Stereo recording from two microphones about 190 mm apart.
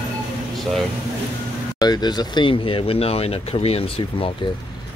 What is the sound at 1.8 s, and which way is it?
Speech, 20° left (ahead or behind).